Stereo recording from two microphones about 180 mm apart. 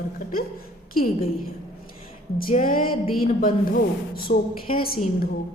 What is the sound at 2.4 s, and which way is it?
A woman's voice, 50° left (ahead or behind).